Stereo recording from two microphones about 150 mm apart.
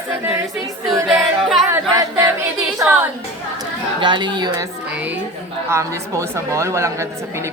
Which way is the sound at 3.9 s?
30° right (ahead or behind).